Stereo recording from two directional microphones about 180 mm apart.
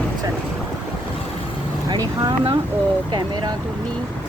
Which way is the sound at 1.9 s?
25° right (ahead or behind).